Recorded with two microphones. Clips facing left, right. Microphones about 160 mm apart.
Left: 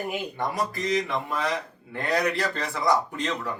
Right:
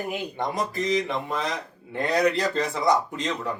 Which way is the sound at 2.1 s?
20° right (ahead or behind).